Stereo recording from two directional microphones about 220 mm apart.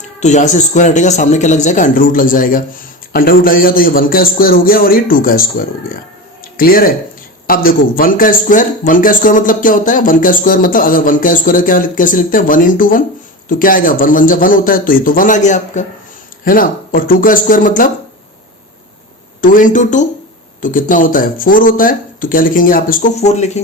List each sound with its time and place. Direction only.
0.2 s a man's voice: 30° left (ahead or behind)
19.4 s a man's voice: 40° left (ahead or behind)